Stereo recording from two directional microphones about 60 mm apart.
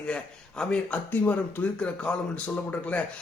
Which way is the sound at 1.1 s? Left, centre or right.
Left.